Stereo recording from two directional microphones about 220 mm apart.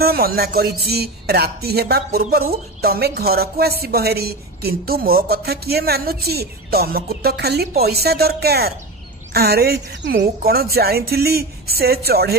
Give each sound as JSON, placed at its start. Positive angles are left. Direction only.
{"t": 0.0, "sound": "a woman's voice", "side_deg": -45}